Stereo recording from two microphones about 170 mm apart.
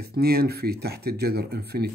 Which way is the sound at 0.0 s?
65° right (ahead or behind).